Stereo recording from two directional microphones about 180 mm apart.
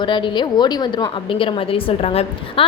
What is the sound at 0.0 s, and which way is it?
A woman's voice, 25° left (ahead or behind).